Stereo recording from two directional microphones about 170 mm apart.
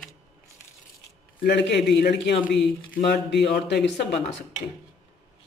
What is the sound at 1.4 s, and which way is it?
A man's voice, 80° left.